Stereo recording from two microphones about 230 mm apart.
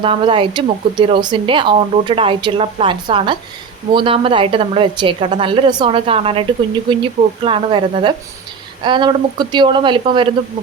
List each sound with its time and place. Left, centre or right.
0.0 s speech: right